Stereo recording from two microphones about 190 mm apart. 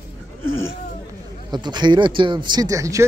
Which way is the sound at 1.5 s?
25° right (ahead or behind).